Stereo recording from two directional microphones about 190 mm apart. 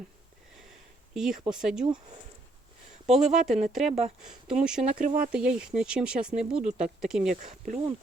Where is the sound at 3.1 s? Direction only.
Centre (ahead or behind).